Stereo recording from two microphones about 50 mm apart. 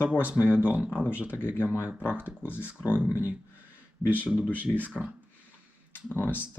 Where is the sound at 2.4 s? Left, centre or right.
Left.